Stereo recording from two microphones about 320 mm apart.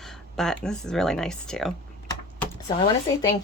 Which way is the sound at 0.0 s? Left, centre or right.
Centre.